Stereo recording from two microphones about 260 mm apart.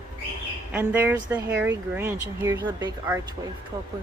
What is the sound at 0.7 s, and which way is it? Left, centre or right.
Speech, centre.